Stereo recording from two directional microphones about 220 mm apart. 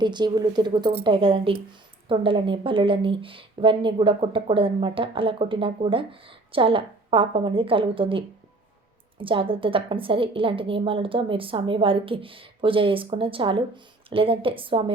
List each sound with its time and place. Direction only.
0.0 s a woman's voice: 20° right (ahead or behind)